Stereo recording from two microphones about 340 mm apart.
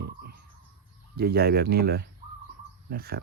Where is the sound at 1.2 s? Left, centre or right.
Right.